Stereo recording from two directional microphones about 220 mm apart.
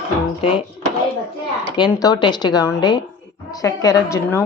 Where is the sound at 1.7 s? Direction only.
20° left (ahead or behind).